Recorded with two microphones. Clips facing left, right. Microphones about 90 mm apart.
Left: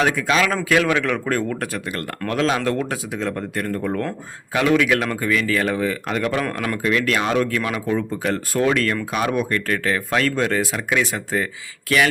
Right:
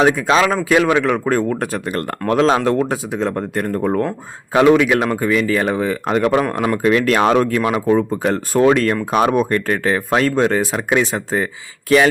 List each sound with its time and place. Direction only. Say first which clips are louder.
0.0 s speech: right 5 dB; 25° right (ahead or behind)
2.6 s speech: right 5 dB; 20° right (ahead or behind)
6.4 s speech: right 6 dB; 20° right (ahead or behind); by 7.4 s 45° right (ahead or behind)
7.4 s speech: right 6 dB; 30° right (ahead or behind)